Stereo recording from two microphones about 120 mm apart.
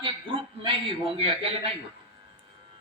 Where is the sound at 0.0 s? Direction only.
45° right (ahead or behind).